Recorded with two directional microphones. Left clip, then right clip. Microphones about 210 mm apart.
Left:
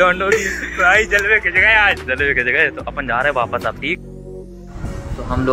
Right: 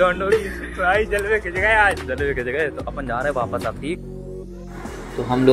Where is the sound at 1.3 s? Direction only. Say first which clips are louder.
Left 7 dB; 15° right (ahead or behind).